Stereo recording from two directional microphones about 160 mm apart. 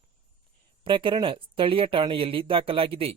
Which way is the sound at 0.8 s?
30° right (ahead or behind).